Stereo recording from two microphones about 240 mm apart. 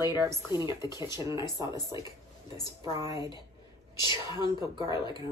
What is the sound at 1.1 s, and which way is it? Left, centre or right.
Speech, centre.